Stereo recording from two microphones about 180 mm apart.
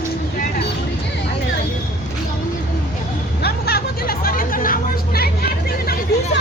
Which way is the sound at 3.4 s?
60° left (ahead or behind).